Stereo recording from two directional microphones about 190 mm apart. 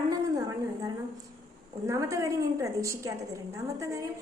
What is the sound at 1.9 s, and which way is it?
A woman's voice, 15° right (ahead or behind).